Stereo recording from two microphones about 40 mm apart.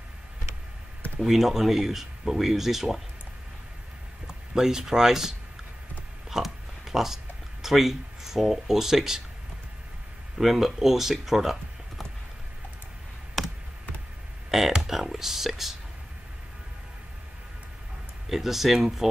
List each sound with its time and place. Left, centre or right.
1.2 s speech: centre
4.6 s speech: centre
6.3 s a sound: centre
7.6 s speech: centre
10.3 s speech: centre
14.7 s a sound: centre
18.3 s speech: centre